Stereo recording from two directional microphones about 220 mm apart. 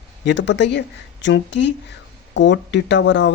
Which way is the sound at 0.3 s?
55° left (ahead or behind).